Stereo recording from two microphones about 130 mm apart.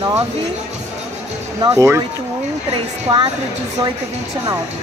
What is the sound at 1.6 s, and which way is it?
Speech, 25° right (ahead or behind).